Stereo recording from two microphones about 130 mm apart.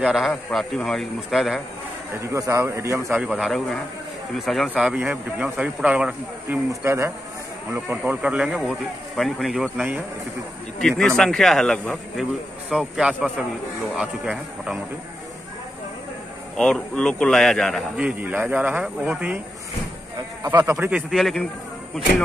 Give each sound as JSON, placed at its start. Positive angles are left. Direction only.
{"t": 0.0, "sound": "a man's voice", "side_deg": -5}
{"t": 2.3, "sound": "a man's voice", "side_deg": -25}
{"t": 3.3, "sound": "a man's voice", "side_deg": 0}
{"t": 6.7, "sound": "a man's voice", "side_deg": -20}
{"t": 7.9, "sound": "a man's voice", "side_deg": -10}
{"t": 16.5, "sound": "a man's voice", "side_deg": 5}
{"t": 17.9, "sound": "a man's voice", "side_deg": -10}
{"t": 20.6, "sound": "a man's voice", "side_deg": -15}
{"t": 21.1, "sound": "a man's voice", "side_deg": 0}